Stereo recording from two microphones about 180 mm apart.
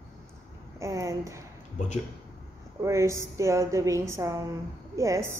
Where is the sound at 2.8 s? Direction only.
15° right (ahead or behind).